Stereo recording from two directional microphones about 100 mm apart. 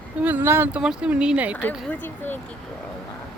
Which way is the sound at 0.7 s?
10° right (ahead or behind).